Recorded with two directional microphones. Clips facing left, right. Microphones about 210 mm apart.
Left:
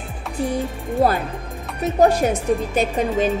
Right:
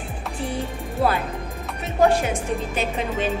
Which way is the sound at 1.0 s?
40° left (ahead or behind).